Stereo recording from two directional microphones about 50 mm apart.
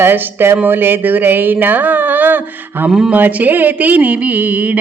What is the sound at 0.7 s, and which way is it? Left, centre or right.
Speech, right.